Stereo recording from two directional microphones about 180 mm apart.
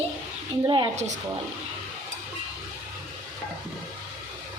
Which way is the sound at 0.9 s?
40° right (ahead or behind).